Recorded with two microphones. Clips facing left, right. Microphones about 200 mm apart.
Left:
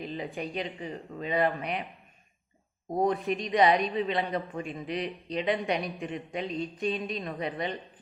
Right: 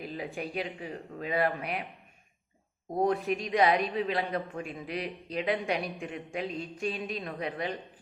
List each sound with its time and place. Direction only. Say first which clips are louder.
0.0 s a man's voice: left 2 dB; 5° right (ahead or behind)
3.0 s a man's voice: even; centre (ahead or behind)